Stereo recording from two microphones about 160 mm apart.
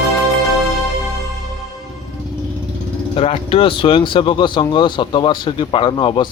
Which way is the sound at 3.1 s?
35° left (ahead or behind).